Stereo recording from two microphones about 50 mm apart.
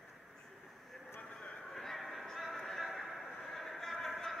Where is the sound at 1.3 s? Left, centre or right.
Left.